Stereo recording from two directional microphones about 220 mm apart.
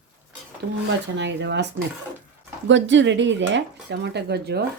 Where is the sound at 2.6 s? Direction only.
55° right (ahead or behind).